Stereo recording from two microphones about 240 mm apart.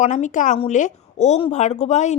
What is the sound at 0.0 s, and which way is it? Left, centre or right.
A woman's voice, left.